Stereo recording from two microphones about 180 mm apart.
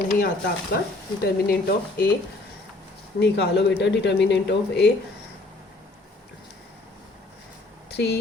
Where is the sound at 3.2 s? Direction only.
70° left (ahead or behind).